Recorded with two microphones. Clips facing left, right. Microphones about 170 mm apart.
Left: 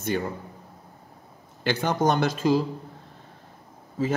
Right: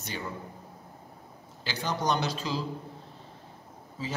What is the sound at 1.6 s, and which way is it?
Speech, 60° left (ahead or behind).